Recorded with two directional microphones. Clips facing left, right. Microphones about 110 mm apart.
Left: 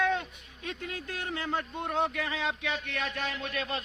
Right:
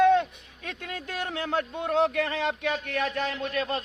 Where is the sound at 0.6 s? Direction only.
80° right.